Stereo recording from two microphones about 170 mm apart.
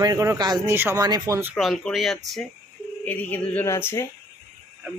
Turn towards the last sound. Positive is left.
turn(degrees=15)  # may be behind; listen again after turning